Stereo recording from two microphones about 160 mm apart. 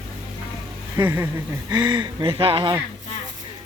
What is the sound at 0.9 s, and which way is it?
Speech, 15° right (ahead or behind).